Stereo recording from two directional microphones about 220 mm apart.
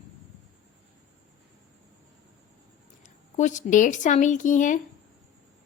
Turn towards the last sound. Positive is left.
turn(degrees=35)  # may be behind; listen again after turning